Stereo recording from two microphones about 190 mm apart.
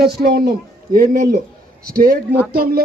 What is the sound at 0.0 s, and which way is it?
Speech, 55° right (ahead or behind).